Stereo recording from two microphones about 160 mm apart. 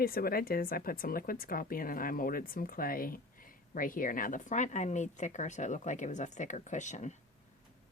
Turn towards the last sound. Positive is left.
turn(degrees=50)  # may be behind; listen again after turning